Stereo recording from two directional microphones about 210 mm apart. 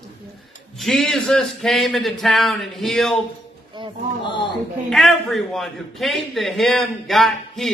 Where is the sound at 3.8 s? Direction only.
25° right (ahead or behind).